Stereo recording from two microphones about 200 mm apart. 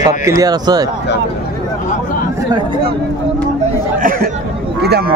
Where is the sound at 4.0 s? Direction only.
45° right (ahead or behind).